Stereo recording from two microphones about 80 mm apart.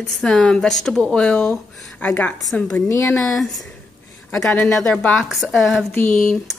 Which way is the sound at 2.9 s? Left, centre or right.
Left.